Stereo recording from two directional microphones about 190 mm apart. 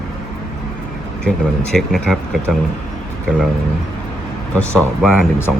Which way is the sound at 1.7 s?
Centre (ahead or behind).